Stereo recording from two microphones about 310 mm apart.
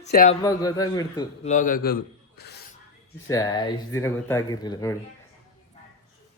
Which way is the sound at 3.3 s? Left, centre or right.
Centre.